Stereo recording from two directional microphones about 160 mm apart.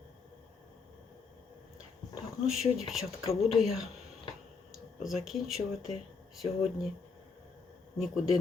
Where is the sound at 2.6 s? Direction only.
Centre (ahead or behind).